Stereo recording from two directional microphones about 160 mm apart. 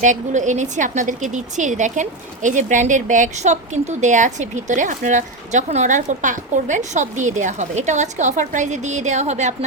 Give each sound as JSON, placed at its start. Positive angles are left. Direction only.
{"t": 0.0, "sound": "a woman's voice", "side_deg": -50}